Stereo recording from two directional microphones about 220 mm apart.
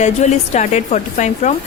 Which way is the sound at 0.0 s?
30° left (ahead or behind).